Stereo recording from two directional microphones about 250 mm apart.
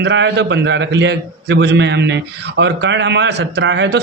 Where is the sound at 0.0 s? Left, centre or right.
Right.